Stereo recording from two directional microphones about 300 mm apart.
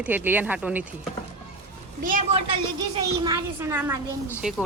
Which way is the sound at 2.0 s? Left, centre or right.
Right.